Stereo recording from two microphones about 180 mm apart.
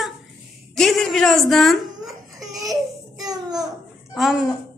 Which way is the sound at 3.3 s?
20° right (ahead or behind).